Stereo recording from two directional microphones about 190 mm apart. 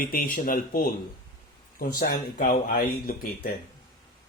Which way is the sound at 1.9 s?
50° left (ahead or behind).